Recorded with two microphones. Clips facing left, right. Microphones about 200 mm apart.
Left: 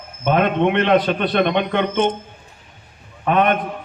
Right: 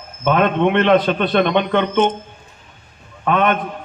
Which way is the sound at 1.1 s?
50° left (ahead or behind).